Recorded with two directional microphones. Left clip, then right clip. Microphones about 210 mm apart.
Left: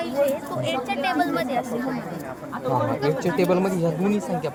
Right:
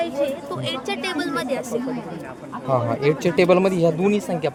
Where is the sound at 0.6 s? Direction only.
45° right (ahead or behind).